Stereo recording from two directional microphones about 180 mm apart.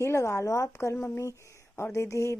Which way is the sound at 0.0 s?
15° left (ahead or behind).